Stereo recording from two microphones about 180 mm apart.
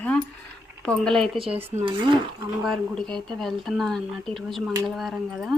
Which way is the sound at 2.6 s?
Centre (ahead or behind).